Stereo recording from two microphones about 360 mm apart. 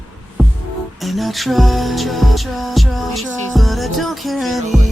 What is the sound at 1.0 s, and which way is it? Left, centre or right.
Music, centre.